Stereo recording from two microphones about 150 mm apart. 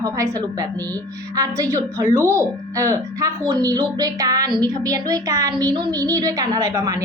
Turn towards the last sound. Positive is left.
turn(degrees=-25)  # may be behind; listen again after turning